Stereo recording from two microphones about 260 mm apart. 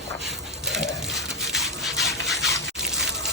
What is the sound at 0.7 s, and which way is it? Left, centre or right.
Rub, centre.